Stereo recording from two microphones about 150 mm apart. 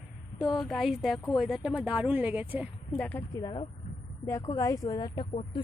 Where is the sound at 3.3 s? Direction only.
30° left (ahead or behind).